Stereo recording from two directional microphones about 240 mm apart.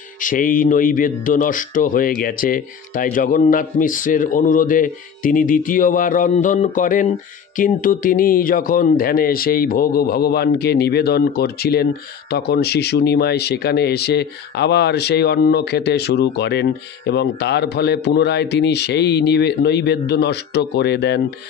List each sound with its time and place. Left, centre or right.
0.2 s speech: left